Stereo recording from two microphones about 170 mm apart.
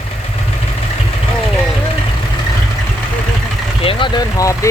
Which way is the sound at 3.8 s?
30° left (ahead or behind).